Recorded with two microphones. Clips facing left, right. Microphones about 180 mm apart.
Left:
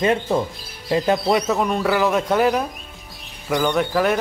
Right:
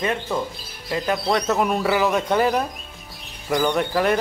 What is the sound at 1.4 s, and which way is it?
Speech, centre (ahead or behind).